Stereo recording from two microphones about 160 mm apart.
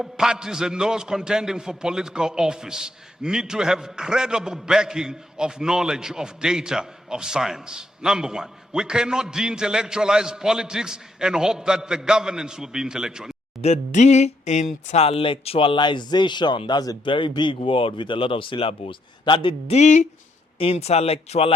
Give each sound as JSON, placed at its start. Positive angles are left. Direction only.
{"t": 0.0, "sound": "a man's voice", "side_deg": -5}
{"t": 13.6, "sound": "a sound", "side_deg": 45}
{"t": 14.8, "sound": "speech", "side_deg": 40}